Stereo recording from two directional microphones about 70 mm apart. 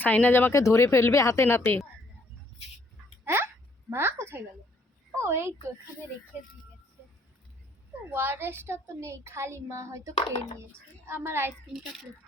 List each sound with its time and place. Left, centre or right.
0.0 s speech: left
0.5 s speech: left
3.2 s a sound: right
5.1 s a woman's voice: right
8.1 s a woman's voice: right
10.7 s a woman's voice: right